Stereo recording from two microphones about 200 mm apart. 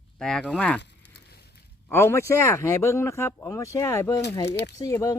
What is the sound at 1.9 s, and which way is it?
Speech, 10° left (ahead or behind).